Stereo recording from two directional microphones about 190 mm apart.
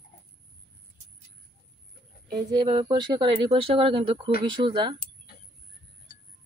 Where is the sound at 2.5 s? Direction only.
25° right (ahead or behind).